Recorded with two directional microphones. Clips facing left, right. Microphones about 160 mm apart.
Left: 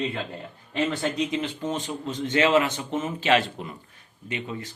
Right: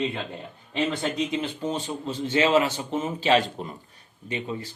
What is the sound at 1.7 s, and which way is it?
Speech, 35° right (ahead or behind).